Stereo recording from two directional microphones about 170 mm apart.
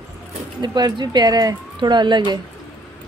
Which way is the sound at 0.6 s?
25° right (ahead or behind).